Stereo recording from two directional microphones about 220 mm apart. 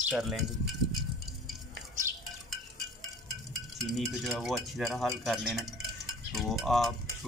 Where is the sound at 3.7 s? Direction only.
Centre (ahead or behind).